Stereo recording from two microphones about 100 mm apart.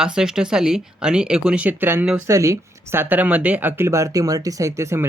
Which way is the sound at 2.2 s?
30° right (ahead or behind).